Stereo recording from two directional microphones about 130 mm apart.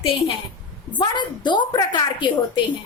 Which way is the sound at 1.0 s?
35° left (ahead or behind).